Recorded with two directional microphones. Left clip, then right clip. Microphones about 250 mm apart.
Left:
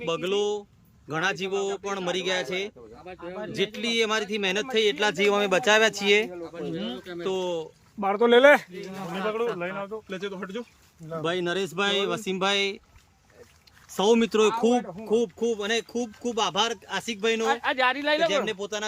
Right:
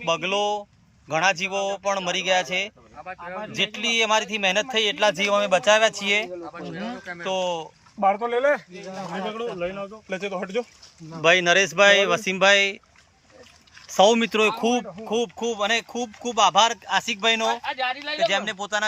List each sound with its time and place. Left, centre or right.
0.0 s speech: centre
8.4 s speech: left
10.1 s speech: centre
13.8 s speech: centre
17.5 s speech: centre
18.3 s speech: centre